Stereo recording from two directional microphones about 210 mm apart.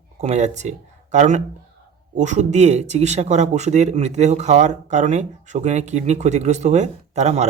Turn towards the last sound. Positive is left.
turn(degrees=-30)  # may be behind; listen again after turning